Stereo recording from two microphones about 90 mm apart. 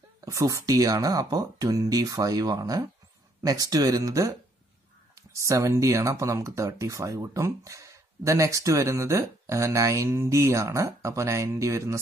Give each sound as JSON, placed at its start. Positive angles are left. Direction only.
{"t": 0.2, "sound": "speech", "side_deg": -35}